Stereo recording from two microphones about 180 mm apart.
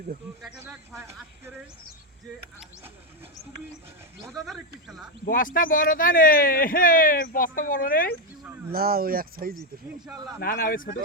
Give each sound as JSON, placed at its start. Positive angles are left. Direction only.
{"t": 4.3, "sound": "speech", "side_deg": 0}
{"t": 5.2, "sound": "speech", "side_deg": 50}
{"t": 8.7, "sound": "speech", "side_deg": -55}
{"t": 10.4, "sound": "speech", "side_deg": 55}